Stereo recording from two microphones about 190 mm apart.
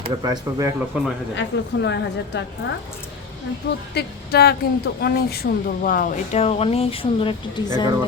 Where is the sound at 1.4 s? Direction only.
65° left (ahead or behind).